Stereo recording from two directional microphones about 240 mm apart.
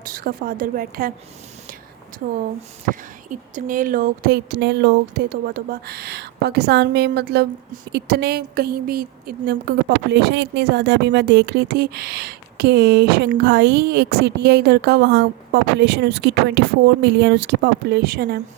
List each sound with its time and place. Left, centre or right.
0.0 s a woman's voice: right
2.2 s a woman's voice: right